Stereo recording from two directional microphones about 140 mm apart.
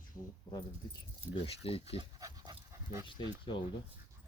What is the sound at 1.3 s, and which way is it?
Speech, 45° left (ahead or behind).